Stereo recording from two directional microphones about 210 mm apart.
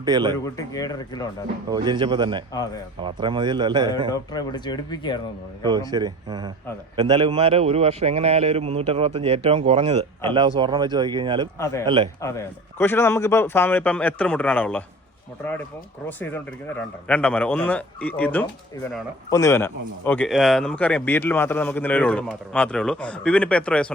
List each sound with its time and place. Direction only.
0.0 s a man's voice: 20° right (ahead or behind)
0.4 s speech: 15° left (ahead or behind)
1.7 s a man's voice: 20° right (ahead or behind)
4.1 s speech: 20° left (ahead or behind)
5.9 s a man's voice: 20° right (ahead or behind)
11.6 s speech: 15° left (ahead or behind)
16.0 s speech: 10° left (ahead or behind)